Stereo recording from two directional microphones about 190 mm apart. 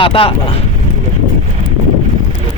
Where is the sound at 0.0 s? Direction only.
30° left (ahead or behind).